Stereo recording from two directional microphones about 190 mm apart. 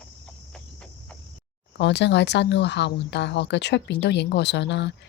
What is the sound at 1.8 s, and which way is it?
Speech, 65° left (ahead or behind).